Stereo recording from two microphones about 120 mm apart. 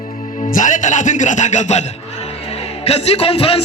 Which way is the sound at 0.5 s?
90° left.